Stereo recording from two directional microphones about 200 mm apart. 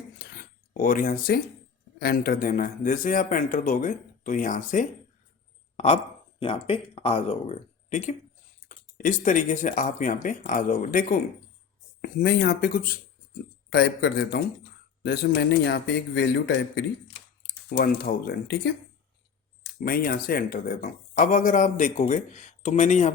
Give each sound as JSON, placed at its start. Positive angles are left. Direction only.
{"t": 0.2, "sound": "a sound", "side_deg": 45}
{"t": 2.0, "sound": "speech", "side_deg": 50}
{"t": 12.0, "sound": "speech", "side_deg": 55}
{"t": 13.7, "sound": "a man's voice", "side_deg": 55}
{"t": 19.8, "sound": "speech", "side_deg": 50}